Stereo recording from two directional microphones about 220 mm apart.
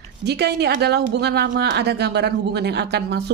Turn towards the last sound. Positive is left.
turn(degrees=-50)  # may be behind; listen again after turning